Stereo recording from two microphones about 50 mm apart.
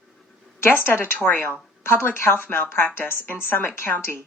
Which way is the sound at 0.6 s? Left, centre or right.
Left.